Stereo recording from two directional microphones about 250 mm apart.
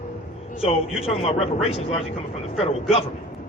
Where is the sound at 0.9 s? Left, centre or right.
Left.